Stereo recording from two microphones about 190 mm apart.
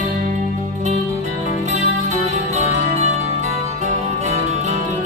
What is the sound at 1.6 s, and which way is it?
Music, 35° right (ahead or behind).